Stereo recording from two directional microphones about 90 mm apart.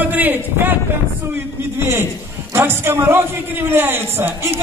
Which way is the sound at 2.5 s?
25° right (ahead or behind).